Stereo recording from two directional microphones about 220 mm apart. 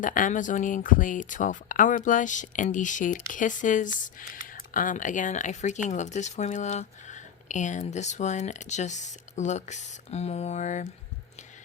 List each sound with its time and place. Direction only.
0.0 s speech: 35° left (ahead or behind)